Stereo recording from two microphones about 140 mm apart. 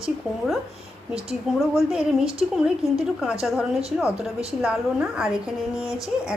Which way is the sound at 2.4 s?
Centre (ahead or behind).